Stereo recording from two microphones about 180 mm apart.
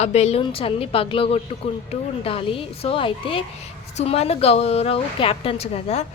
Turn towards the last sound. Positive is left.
turn(degrees=35)  # may be behind; listen again after turning